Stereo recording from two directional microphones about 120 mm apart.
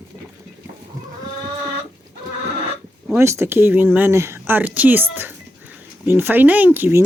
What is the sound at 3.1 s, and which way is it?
Speech, 25° right (ahead or behind).